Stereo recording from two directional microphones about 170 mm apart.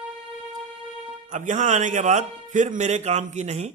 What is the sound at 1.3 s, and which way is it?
A man's voice, 45° right (ahead or behind).